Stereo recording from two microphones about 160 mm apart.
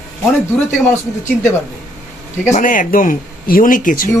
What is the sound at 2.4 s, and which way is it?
Speech, 50° left (ahead or behind).